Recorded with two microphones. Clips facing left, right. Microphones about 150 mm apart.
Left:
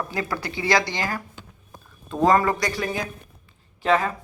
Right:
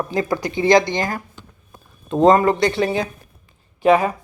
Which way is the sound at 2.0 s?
20° right (ahead or behind).